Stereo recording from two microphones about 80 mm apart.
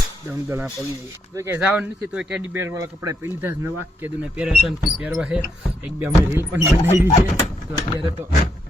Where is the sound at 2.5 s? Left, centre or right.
Right.